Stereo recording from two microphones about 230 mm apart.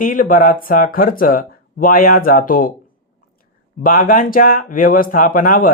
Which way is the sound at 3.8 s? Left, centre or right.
Left.